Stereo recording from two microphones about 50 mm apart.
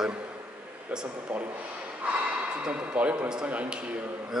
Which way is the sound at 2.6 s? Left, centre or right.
Right.